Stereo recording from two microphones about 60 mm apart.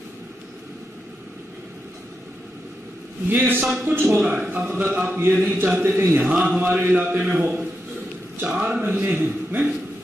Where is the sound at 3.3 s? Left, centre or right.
Right.